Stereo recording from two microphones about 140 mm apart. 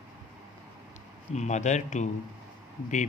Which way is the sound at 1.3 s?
55° left (ahead or behind).